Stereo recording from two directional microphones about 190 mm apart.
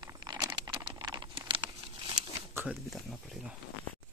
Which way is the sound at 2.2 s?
35° right (ahead or behind).